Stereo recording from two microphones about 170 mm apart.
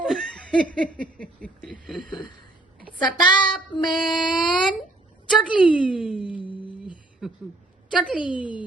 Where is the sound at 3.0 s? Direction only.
25° left (ahead or behind).